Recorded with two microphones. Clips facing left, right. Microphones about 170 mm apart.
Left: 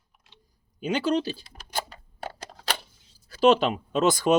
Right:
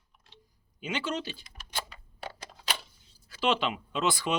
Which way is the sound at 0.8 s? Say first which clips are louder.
Left 8 dB; 40° left (ahead or behind).